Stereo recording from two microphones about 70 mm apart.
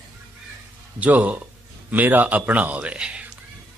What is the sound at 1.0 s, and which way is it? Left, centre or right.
Speech, right.